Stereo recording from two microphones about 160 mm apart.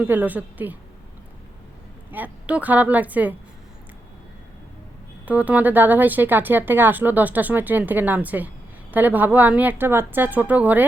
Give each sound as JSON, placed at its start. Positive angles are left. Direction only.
{"t": 0.0, "sound": "speech", "side_deg": -10}
{"t": 2.0, "sound": "speech", "side_deg": -10}
{"t": 5.2, "sound": "speech", "side_deg": -10}